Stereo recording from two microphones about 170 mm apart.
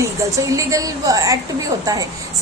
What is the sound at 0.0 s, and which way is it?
A woman's voice, 20° right (ahead or behind).